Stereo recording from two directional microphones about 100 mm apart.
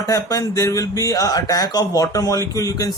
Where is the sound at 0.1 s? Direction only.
35° left (ahead or behind).